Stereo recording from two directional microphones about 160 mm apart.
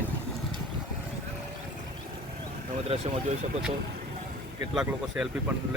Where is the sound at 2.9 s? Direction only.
40° right (ahead or behind).